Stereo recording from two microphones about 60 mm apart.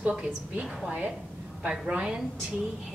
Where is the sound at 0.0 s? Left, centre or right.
Centre.